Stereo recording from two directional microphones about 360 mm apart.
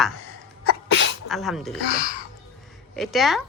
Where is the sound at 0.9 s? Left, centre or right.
Left.